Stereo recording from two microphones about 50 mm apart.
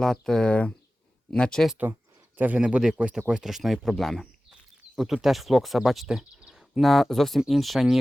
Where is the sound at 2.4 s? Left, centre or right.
Right.